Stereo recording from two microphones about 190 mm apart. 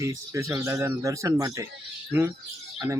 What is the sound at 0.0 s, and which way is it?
Speech, 15° right (ahead or behind).